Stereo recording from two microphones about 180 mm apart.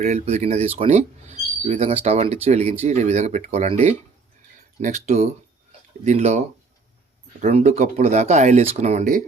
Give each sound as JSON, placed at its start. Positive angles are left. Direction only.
{"t": 0.0, "sound": "speech", "side_deg": -40}
{"t": 7.4, "sound": "speech", "side_deg": -40}